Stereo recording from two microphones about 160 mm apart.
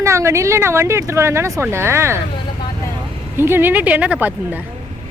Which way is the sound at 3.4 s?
15° right (ahead or behind).